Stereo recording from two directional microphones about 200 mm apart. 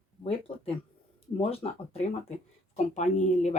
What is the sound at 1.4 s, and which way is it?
Speech, 30° left (ahead or behind).